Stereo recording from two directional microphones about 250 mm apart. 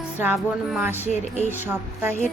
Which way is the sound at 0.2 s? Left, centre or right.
Centre.